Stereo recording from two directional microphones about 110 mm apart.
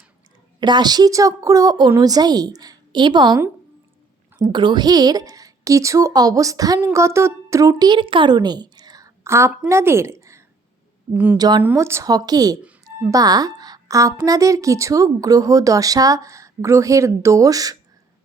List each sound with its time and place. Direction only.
0.6 s a woman's voice: 40° right (ahead or behind)
4.4 s a woman's voice: 45° right (ahead or behind); by 10.4 s 25° right (ahead or behind)
11.1 s a woman's voice: 15° right (ahead or behind)
11.3 s a woman's voice: 40° right (ahead or behind)
11.6 s speech: 20° right (ahead or behind)
12.1 s a woman's voice: 35° right (ahead or behind)